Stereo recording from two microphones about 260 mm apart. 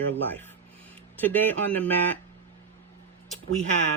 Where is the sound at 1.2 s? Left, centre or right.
Centre.